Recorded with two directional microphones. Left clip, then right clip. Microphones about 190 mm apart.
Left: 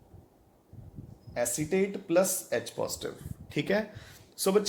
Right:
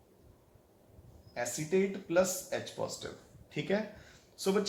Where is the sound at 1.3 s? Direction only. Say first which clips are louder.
Left 3 dB; 55° left (ahead or behind).